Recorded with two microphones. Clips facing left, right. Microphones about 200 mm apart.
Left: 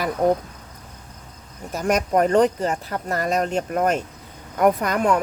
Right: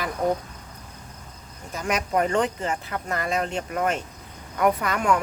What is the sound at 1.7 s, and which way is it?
Speech, 45° left (ahead or behind).